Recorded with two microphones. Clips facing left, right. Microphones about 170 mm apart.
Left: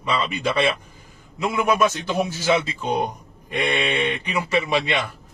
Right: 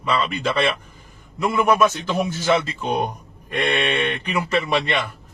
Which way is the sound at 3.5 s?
15° left (ahead or behind).